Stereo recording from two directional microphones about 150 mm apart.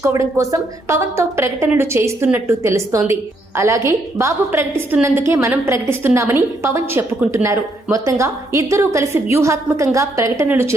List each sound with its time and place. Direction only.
0.0 s a woman's voice: 20° right (ahead or behind)